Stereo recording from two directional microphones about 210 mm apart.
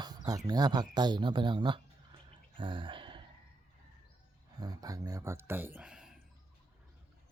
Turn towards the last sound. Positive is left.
turn(degrees=-5)  # may be behind; listen again after turning